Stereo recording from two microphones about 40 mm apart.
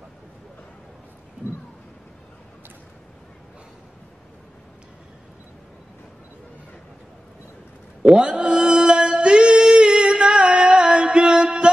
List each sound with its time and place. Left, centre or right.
8.0 s music: right